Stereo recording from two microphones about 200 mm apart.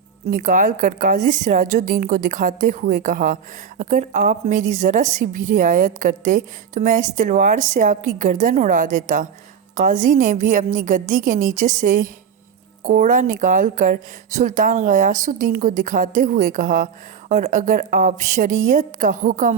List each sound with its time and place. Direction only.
0.3 s speech: 40° right (ahead or behind)